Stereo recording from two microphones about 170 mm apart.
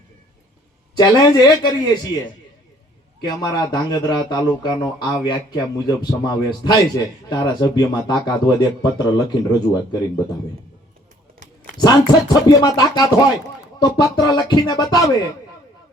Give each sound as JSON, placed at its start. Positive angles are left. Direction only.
{"t": 0.9, "sound": "speech", "side_deg": 25}
{"t": 3.2, "sound": "speech", "side_deg": 25}
{"t": 11.8, "sound": "speech", "side_deg": 25}